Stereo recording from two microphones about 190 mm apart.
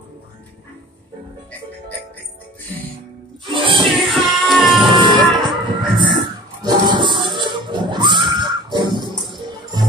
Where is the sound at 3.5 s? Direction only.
25° right (ahead or behind).